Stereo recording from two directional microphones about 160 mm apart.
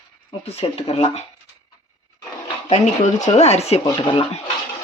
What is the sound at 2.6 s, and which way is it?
Speech, 45° left (ahead or behind).